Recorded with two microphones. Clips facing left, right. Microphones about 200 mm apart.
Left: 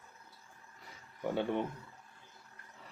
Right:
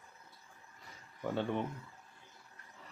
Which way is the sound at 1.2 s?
10° left (ahead or behind).